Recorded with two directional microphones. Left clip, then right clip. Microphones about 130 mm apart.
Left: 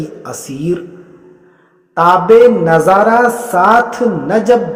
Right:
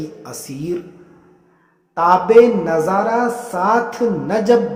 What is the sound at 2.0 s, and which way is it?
Mantra, 35° left (ahead or behind).